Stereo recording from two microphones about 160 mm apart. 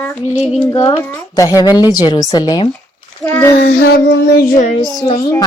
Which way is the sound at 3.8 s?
70° left (ahead or behind).